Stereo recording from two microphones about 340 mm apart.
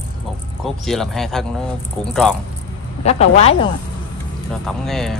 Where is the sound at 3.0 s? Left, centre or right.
Centre.